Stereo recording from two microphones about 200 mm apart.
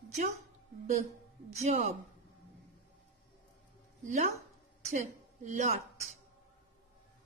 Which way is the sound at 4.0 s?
40° right (ahead or behind).